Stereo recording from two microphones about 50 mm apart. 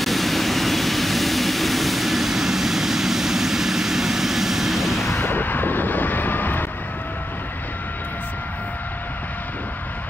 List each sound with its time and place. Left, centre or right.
0.0 s vehicle: centre
5.2 s vehicle: left